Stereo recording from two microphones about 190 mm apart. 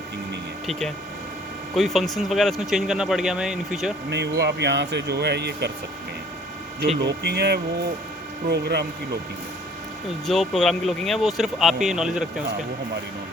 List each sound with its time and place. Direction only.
0.7 s speech: centre (ahead or behind)
4.1 s speech: 65° right (ahead or behind)
7.2 s speech: 60° right (ahead or behind)
10.2 s speech: centre (ahead or behind)